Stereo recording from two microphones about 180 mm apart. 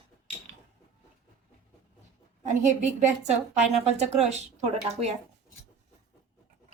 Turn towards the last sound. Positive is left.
turn(degrees=-35)  # may be behind; listen again after turning